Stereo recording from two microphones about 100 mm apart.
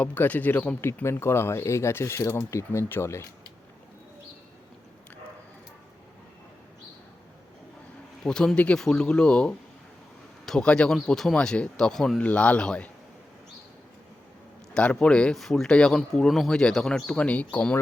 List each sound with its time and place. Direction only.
0.0 s speech: 15° left (ahead or behind)
1.0 s speech: 25° left (ahead or behind)
8.2 s speech: 5° left (ahead or behind)
14.7 s speech: 10° left (ahead or behind)